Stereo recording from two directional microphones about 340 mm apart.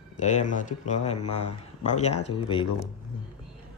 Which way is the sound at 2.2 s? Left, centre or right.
Centre.